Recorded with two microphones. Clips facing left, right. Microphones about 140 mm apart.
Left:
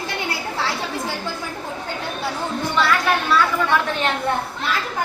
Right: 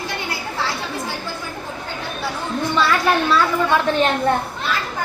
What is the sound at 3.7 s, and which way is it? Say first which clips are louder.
Speech: right 3 dB; 30° right (ahead or behind).